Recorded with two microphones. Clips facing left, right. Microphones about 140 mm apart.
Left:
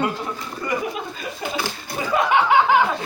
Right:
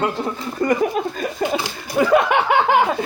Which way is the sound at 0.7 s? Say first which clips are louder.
Right 6 dB; 45° right (ahead or behind).